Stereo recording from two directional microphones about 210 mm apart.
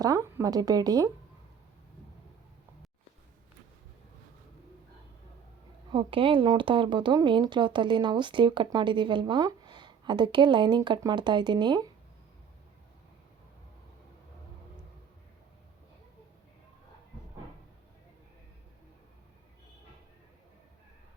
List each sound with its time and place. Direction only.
0.0 s a woman's voice: 15° right (ahead or behind)
5.9 s speech: 25° right (ahead or behind)